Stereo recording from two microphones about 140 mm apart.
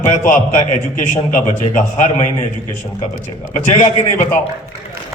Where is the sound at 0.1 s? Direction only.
60° left (ahead or behind).